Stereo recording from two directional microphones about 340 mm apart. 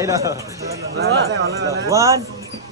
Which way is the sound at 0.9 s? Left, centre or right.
Right.